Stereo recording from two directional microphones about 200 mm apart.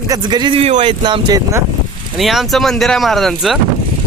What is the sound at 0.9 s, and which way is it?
Speech, 20° right (ahead or behind).